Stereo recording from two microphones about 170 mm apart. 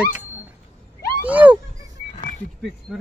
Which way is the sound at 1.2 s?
10° right (ahead or behind).